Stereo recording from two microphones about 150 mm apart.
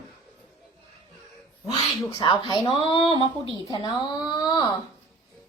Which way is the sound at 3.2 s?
30° right (ahead or behind).